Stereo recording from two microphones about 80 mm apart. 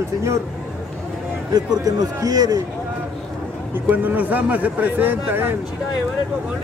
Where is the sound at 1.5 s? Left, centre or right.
Right.